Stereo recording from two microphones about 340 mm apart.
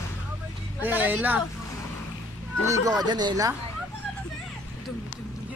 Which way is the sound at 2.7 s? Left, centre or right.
Centre.